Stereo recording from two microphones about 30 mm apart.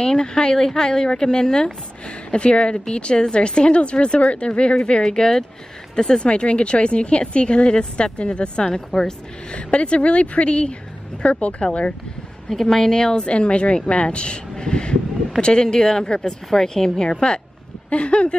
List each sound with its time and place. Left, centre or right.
0.0 s a woman's voice: left
9.5 s speech: left
12.4 s speech: centre
12.9 s a woman's voice: left
13.2 s a woman's voice: left
16.3 s speech: centre
17.2 s speech: left